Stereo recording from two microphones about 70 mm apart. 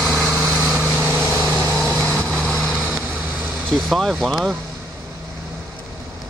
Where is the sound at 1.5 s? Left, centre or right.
Centre.